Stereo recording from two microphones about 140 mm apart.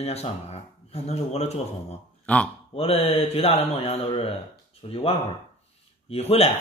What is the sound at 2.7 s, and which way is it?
Speech, 45° left (ahead or behind).